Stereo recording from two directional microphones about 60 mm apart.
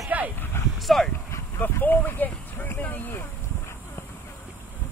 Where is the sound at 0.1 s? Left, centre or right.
Right.